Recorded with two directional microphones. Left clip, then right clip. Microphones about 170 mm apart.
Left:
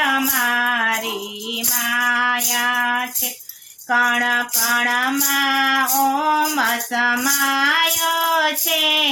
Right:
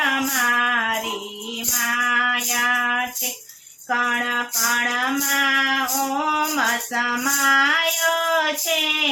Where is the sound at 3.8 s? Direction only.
30° left (ahead or behind).